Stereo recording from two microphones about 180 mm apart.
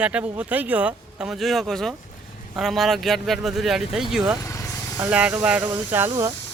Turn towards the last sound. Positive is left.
turn(degrees=-15)  # may be behind; listen again after turning